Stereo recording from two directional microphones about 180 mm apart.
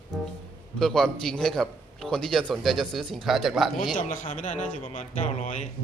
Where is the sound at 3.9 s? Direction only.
45° left (ahead or behind).